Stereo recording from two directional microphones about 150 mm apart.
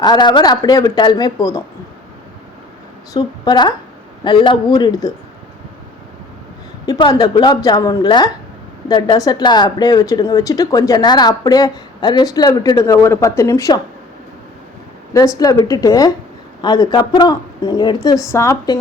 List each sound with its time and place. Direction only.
0.0 s a woman's voice: 30° left (ahead or behind)
3.1 s a woman's voice: 25° left (ahead or behind)
6.8 s a woman's voice: 25° left (ahead or behind)
15.1 s a woman's voice: 20° left (ahead or behind)